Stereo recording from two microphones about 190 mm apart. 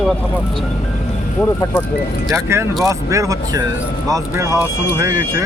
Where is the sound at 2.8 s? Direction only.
15° right (ahead or behind).